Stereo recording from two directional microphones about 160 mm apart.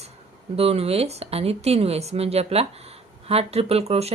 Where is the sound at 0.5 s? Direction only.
40° right (ahead or behind).